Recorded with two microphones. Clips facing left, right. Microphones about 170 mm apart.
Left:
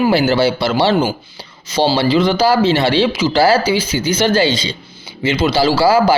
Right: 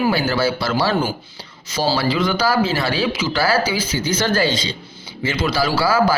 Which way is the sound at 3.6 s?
75° left (ahead or behind).